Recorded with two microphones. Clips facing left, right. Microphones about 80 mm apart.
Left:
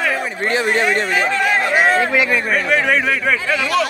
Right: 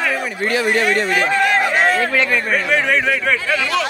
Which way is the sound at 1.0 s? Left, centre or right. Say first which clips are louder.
Right 1 dB; centre.